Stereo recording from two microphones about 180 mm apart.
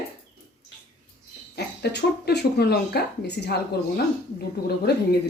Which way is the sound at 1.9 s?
65° left (ahead or behind).